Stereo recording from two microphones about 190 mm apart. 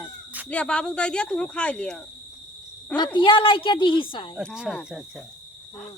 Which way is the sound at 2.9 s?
25° left (ahead or behind).